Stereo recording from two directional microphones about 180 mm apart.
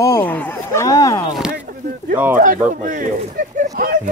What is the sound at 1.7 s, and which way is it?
Speech, 50° right (ahead or behind).